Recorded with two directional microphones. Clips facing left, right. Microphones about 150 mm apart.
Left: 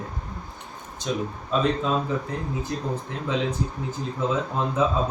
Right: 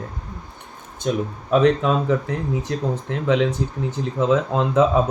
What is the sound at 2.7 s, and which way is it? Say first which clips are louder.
Speech: right 5 dB; 75° right (ahead or behind).